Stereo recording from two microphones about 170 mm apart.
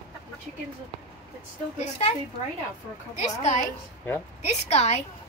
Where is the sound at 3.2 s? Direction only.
45° left (ahead or behind).